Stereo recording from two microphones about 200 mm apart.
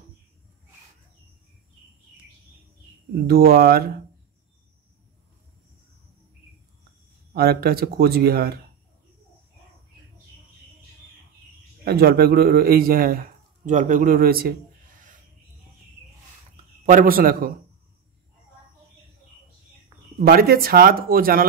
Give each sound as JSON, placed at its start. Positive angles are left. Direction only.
{"t": 3.3, "sound": "a man's voice", "side_deg": -50}
{"t": 7.3, "sound": "a man's voice", "side_deg": -50}
{"t": 11.8, "sound": "a man's voice", "side_deg": -50}
{"t": 16.8, "sound": "a man's voice", "side_deg": -45}
{"t": 20.2, "sound": "a man's voice", "side_deg": -45}